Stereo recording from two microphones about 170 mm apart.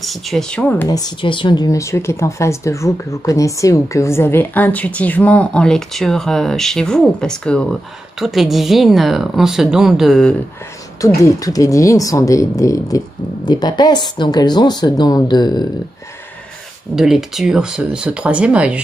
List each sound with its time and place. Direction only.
0.0 s a woman's voice: centre (ahead or behind)
0.8 s a woman's voice: 20° left (ahead or behind); by 10.3 s centre (ahead or behind)
11.2 s speech: 20° left (ahead or behind)
16.9 s a woman's voice: centre (ahead or behind)